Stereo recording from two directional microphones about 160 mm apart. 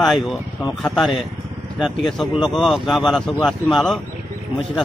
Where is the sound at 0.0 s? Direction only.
Centre (ahead or behind).